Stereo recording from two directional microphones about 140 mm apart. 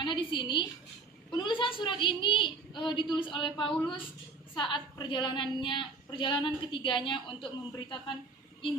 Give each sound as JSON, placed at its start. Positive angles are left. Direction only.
{"t": 0.0, "sound": "a woman's voice", "side_deg": 35}